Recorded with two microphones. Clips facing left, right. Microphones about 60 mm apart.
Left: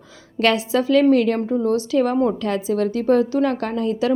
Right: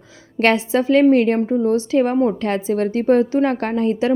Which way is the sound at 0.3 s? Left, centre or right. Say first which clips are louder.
Right 2 dB; right.